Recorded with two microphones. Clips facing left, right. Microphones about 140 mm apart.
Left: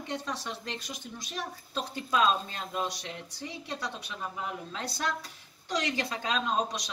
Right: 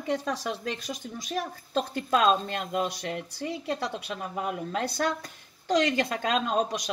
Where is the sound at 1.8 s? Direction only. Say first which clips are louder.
Right 4 dB; 50° right (ahead or behind).